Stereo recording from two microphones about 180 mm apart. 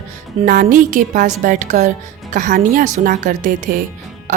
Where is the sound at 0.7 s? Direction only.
50° right (ahead or behind).